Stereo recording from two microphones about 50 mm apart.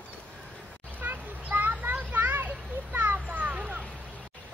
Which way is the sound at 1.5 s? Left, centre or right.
Right.